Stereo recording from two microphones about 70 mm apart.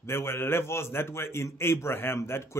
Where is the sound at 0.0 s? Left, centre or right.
Left.